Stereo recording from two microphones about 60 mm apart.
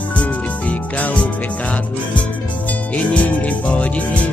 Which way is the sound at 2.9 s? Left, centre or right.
Left.